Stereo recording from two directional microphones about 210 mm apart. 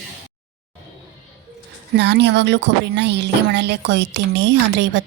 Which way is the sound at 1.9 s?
55° right (ahead or behind).